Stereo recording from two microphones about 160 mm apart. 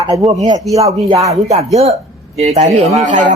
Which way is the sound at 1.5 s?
40° right (ahead or behind).